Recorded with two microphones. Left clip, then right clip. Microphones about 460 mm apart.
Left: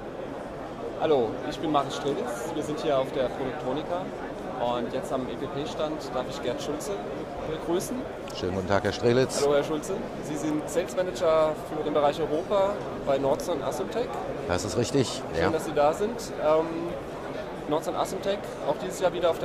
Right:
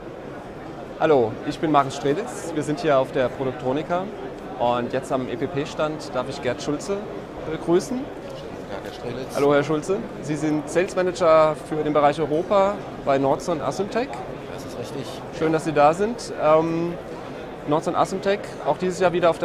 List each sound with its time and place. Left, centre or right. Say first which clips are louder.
1.0 s speech: right 6 dB; right
4.6 s speech: right 7 dB; right
8.7 s speech: left 9 dB; left
9.5 s speech: right 5 dB; right
14.5 s speech: left 5 dB; left
15.5 s speech: right 9 dB; right
17.6 s speech: right 7 dB; right